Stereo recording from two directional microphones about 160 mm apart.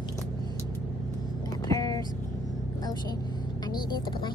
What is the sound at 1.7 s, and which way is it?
Vehicle, 25° left (ahead or behind).